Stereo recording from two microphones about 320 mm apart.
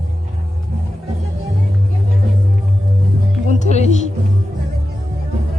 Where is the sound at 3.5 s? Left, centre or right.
Left.